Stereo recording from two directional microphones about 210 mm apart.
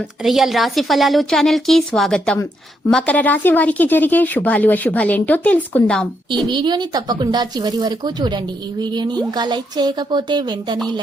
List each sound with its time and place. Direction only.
0.2 s a woman's voice: centre (ahead or behind)
6.5 s speech: 20° right (ahead or behind)